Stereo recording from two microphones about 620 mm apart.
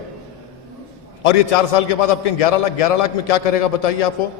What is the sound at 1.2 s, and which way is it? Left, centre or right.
A man's voice, left.